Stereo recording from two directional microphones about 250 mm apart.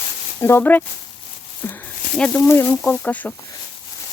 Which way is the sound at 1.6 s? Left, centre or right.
Centre.